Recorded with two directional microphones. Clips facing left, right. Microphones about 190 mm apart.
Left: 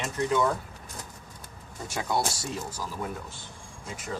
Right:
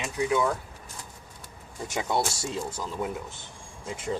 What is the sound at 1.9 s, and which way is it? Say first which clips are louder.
Speech: right 1 dB; 20° right (ahead or behind).